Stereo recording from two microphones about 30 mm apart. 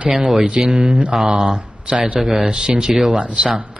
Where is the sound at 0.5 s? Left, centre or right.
Right.